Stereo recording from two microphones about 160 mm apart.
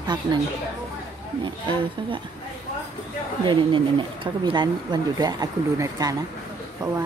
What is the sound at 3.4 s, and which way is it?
Speech, 30° right (ahead or behind).